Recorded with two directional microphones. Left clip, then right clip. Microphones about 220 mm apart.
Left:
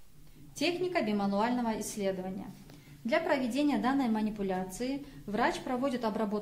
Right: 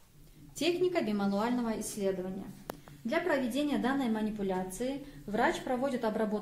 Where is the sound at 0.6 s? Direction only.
15° left (ahead or behind).